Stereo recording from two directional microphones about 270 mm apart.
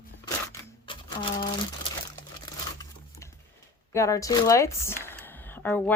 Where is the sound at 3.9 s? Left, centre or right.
Centre.